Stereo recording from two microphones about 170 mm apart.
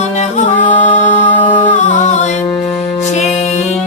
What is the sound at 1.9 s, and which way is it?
Music, 45° left (ahead or behind).